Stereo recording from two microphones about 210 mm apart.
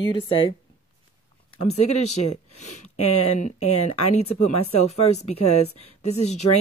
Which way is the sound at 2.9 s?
90° left.